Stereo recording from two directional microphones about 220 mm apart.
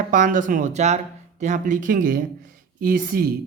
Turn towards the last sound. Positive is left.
turn(degrees=-40)  # may be behind; listen again after turning